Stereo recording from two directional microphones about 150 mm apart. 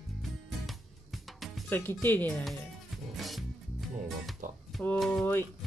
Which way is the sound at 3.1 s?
Centre (ahead or behind).